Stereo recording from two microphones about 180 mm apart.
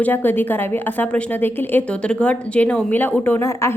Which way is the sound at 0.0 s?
10° left (ahead or behind).